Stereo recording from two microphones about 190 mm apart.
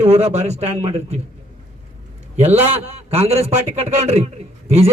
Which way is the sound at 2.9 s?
30° right (ahead or behind).